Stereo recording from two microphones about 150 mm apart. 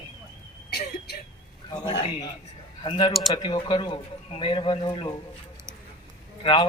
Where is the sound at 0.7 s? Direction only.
90° left.